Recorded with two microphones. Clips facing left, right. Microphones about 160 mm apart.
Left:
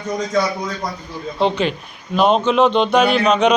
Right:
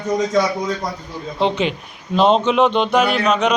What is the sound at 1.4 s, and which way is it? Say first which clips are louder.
A man's voice: left 1 dB; 20° right (ahead or behind).